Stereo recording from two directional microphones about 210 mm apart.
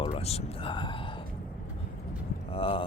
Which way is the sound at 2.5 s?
25° left (ahead or behind).